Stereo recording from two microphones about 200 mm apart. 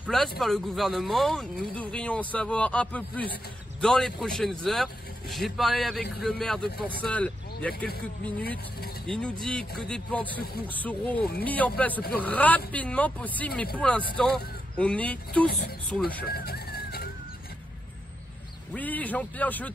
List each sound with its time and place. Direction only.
0.0 s speech: centre (ahead or behind)
9.0 s speech: 5° left (ahead or behind)
16.3 s a sound: 50° left (ahead or behind)
18.7 s speech: 10° left (ahead or behind)